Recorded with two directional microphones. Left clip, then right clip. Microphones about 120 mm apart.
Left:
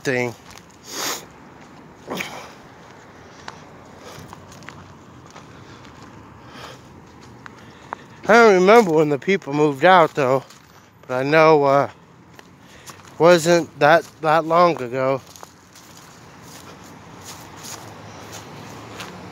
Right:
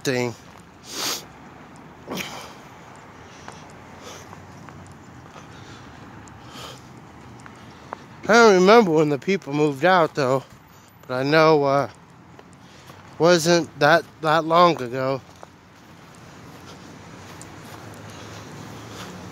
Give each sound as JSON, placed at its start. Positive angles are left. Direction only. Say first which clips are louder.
{"t": 0.0, "sound": "speech", "louder": "left 2 dB", "side_deg": -20}
{"t": 0.8, "sound": "sniff", "louder": "left 1 dB", "side_deg": -5}
{"t": 2.2, "sound": "a sound", "louder": "left 1 dB", "side_deg": -25}
{"t": 6.5, "sound": "a sound", "louder": "even", "side_deg": -30}
{"t": 8.3, "sound": "speech", "louder": "left 2 dB", "side_deg": -20}
{"t": 9.2, "sound": "speech", "louder": "left 3 dB", "side_deg": 0}
{"t": 13.2, "sound": "speech", "louder": "left 4 dB", "side_deg": 0}
{"t": 13.5, "sound": "speech", "louder": "left 3 dB", "side_deg": -10}
{"t": 14.5, "sound": "speech", "louder": "right 1 dB", "side_deg": -30}
{"t": 14.8, "sound": "speech", "louder": "left 4 dB", "side_deg": -10}